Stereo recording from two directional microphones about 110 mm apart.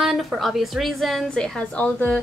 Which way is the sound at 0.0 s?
Centre (ahead or behind).